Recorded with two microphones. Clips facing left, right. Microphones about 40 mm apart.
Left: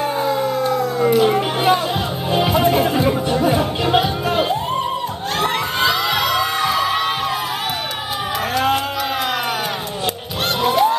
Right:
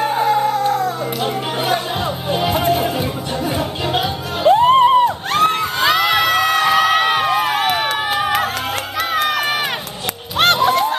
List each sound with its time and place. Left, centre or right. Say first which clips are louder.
0.2 s a sound: right 5 dB; right
1.2 s speech: left 4 dB; left
3.4 s speech: left 1 dB; left
4.5 s music: right 10 dB; right
5.9 s crowd: right 5 dB; right
10.4 s music: right 5 dB; right